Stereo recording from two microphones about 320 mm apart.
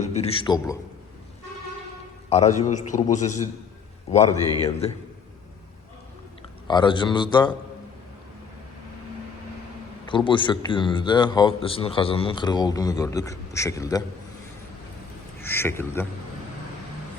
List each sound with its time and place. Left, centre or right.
0.0 s a man's voice: centre
2.3 s a man's voice: centre
6.7 s a man's voice: centre
10.1 s a man's voice: centre
15.4 s a man's voice: centre